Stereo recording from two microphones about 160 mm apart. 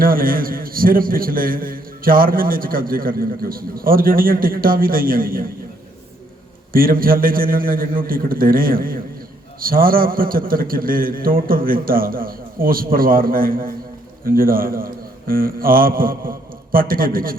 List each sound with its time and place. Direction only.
0.0 s a man's voice: 65° right (ahead or behind)
6.7 s a man's voice: 65° right (ahead or behind)